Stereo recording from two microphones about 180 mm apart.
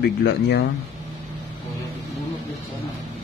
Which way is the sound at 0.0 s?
65° left (ahead or behind).